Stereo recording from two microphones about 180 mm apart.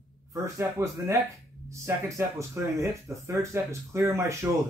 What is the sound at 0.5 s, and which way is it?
Speech, 15° right (ahead or behind).